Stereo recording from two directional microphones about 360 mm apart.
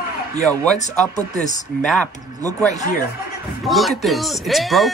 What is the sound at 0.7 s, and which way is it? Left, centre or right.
Speech, centre.